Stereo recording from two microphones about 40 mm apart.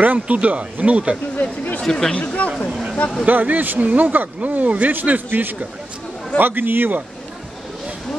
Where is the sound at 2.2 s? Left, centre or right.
Left.